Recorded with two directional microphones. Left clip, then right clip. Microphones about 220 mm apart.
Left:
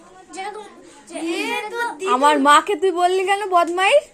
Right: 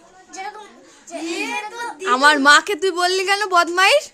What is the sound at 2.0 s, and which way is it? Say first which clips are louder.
A woman's voice: right 2 dB; 20° right (ahead or behind).